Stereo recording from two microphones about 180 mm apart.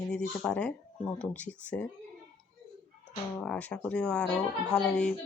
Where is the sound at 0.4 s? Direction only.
5° left (ahead or behind).